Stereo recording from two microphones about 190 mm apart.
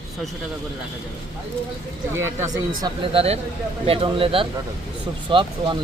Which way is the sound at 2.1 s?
15° right (ahead or behind).